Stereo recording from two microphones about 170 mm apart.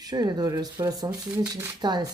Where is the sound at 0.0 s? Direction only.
25° right (ahead or behind).